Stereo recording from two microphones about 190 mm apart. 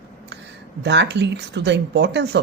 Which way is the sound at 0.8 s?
65° right (ahead or behind).